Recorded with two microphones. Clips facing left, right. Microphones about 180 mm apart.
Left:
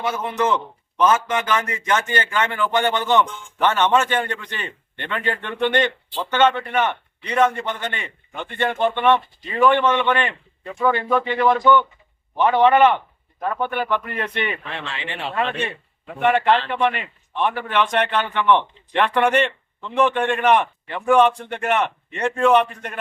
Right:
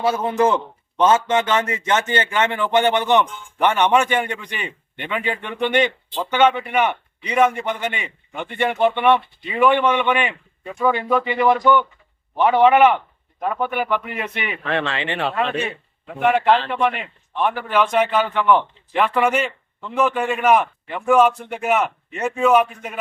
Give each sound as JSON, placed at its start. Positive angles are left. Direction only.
{"t": 0.0, "sound": "a man's voice", "side_deg": -30}
{"t": 14.6, "sound": "speech", "side_deg": -65}
{"t": 16.2, "sound": "a man's voice", "side_deg": 0}